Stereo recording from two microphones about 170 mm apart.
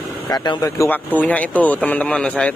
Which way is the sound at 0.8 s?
10° left (ahead or behind).